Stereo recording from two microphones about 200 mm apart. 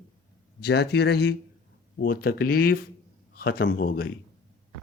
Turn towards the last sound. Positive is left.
turn(degrees=50)  # may be behind; listen again after turning